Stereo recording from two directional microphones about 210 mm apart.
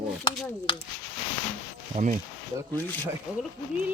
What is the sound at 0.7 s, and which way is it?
Speech, 20° left (ahead or behind).